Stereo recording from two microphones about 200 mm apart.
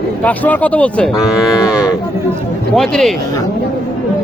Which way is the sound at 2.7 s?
Centre (ahead or behind).